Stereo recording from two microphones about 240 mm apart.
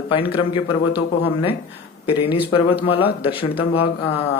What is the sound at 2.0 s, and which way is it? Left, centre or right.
Speech, left.